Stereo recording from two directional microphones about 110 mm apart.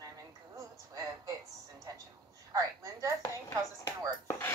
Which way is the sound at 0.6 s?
30° right (ahead or behind).